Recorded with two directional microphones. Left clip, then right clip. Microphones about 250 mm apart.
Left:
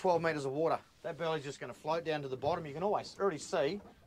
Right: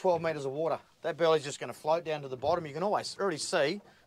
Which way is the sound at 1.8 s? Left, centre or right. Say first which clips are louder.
Right 5 dB; centre.